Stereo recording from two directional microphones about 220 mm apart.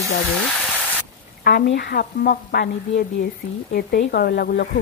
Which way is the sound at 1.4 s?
45° left (ahead or behind).